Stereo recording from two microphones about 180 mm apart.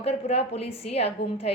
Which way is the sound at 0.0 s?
35° left (ahead or behind).